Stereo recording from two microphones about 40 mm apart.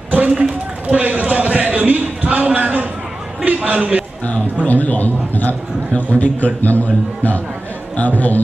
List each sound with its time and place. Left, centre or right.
0.3 s a sound: right
3.4 s a man's voice: right
4.6 s a man's voice: left